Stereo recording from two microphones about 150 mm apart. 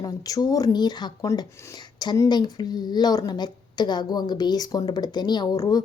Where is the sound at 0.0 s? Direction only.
25° left (ahead or behind).